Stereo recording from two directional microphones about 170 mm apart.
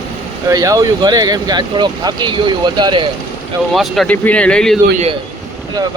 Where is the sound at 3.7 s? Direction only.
Centre (ahead or behind).